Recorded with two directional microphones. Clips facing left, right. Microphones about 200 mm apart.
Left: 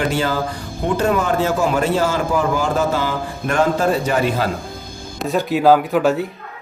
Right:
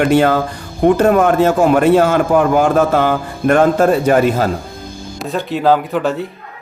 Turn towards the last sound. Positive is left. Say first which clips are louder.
# left 1 dB
turn(degrees=5)  # may be behind; listen again after turning